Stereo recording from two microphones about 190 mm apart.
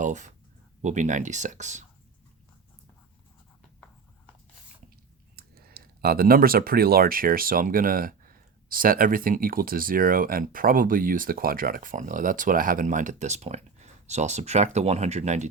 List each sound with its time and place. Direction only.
0.0 s speech: 40° right (ahead or behind)
5.4 s speech: 55° right (ahead or behind); by 15.4 s 40° right (ahead or behind)